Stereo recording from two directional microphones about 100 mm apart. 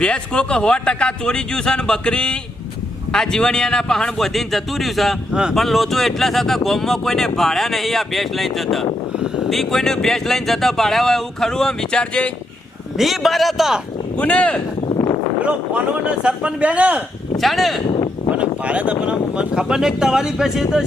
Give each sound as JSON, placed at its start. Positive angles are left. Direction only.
{"t": 0.0, "sound": "a man's voice", "side_deg": 10}
{"t": 13.0, "sound": "a man's voice", "side_deg": 0}
{"t": 14.2, "sound": "speech", "side_deg": 15}
{"t": 14.8, "sound": "a sound", "side_deg": 60}
{"t": 15.4, "sound": "speech", "side_deg": -10}
{"t": 17.3, "sound": "speech", "side_deg": 0}
{"t": 17.8, "sound": "a sound", "side_deg": 55}
{"t": 18.3, "sound": "speech", "side_deg": -10}